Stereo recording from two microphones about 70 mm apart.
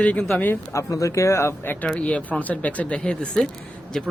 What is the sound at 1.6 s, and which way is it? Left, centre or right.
Speech, left.